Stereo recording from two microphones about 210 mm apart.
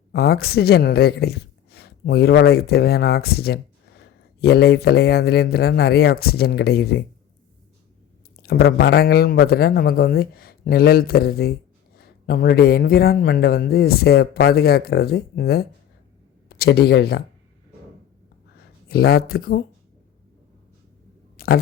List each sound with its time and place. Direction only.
0.1 s speech: 45° left (ahead or behind)
8.4 s speech: 50° left (ahead or behind)
18.9 s speech: 50° left (ahead or behind)
21.3 s tick: 45° left (ahead or behind)